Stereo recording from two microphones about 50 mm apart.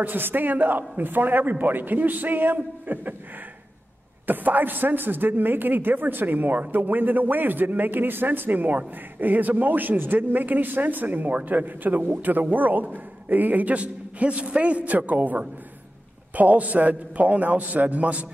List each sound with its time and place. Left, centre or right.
0.0 s speech: right
4.3 s speech: right